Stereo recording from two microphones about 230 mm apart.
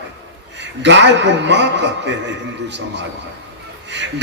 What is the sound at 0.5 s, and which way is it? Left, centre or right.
A man's voice, right.